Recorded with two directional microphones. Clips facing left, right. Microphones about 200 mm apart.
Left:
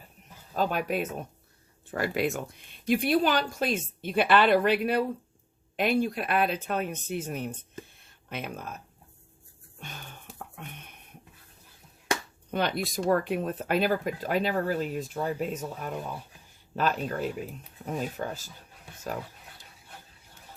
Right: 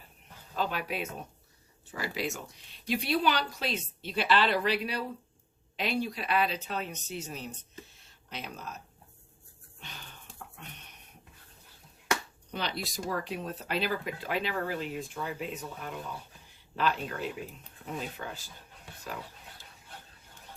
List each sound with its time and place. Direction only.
0.5 s speech: 45° left (ahead or behind)
9.8 s music: 50° left (ahead or behind)
12.5 s speech: 50° left (ahead or behind)